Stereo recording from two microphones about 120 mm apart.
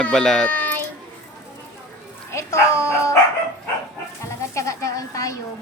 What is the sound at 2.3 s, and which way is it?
Dog, 25° left (ahead or behind).